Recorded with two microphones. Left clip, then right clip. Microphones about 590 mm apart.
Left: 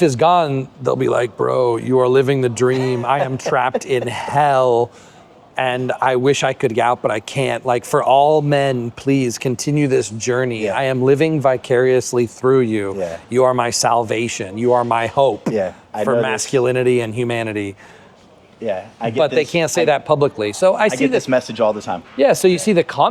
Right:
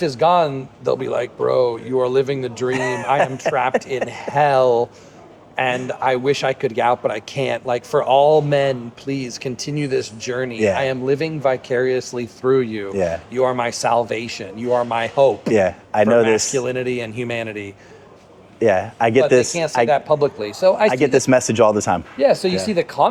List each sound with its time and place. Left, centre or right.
0.0 s speech: left
13.3 s speech: left
15.5 s a man's voice: right
16.2 s speech: left
18.6 s speech: right
19.2 s speech: left
20.1 s speech: left
20.9 s a man's voice: right
22.4 s speech: left